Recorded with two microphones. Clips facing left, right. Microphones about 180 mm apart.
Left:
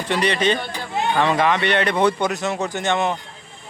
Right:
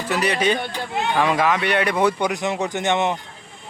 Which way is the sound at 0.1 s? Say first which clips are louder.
Left 1 dB; 5° right (ahead or behind).